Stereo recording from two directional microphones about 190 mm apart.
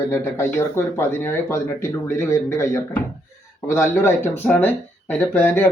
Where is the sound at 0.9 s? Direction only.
15° left (ahead or behind).